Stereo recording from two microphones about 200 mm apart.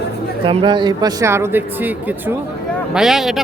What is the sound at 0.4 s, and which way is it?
A man's voice, 25° right (ahead or behind).